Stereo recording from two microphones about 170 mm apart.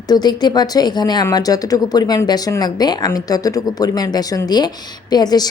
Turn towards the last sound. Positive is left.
turn(degrees=25)  # may be behind; listen again after turning